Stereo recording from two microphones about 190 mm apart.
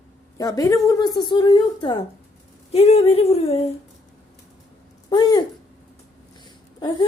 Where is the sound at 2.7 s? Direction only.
30° left (ahead or behind).